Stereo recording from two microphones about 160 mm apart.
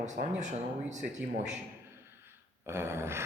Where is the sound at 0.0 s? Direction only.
50° right (ahead or behind).